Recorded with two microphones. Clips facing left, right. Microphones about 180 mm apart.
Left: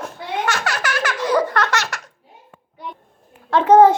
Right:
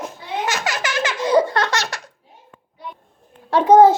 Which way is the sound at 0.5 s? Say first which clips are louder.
Even; 20° right (ahead or behind).